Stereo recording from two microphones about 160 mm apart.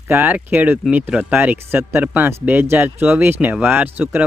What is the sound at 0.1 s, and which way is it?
Speech, 10° right (ahead or behind).